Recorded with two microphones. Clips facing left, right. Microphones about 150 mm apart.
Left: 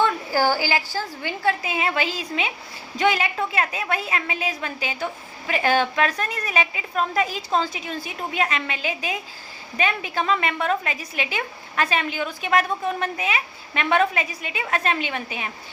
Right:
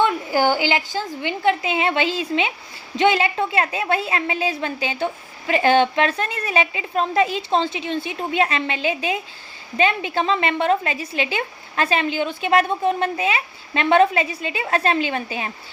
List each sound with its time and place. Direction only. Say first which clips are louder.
0.0 s a woman's voice: right 2 dB; 20° right (ahead or behind)